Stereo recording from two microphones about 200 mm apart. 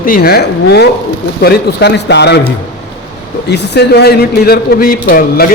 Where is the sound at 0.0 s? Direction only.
45° left (ahead or behind).